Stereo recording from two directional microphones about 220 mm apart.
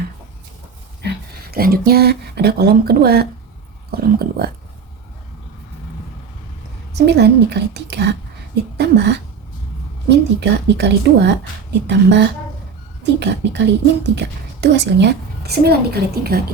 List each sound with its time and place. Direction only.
1.0 s speech: 45° right (ahead or behind)
6.9 s speech: 50° right (ahead or behind)